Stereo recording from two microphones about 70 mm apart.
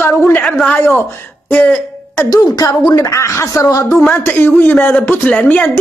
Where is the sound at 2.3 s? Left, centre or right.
Left.